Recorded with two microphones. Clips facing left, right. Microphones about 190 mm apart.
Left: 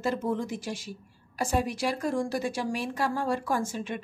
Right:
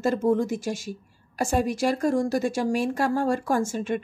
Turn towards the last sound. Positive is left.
turn(degrees=-45)  # may be behind; listen again after turning